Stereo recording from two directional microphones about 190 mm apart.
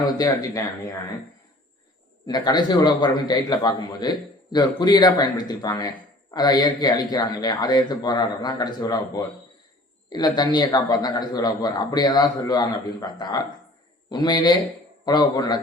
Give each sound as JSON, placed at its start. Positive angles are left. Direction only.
{"t": 0.0, "sound": "speech", "side_deg": 20}
{"t": 2.2, "sound": "a man's voice", "side_deg": 20}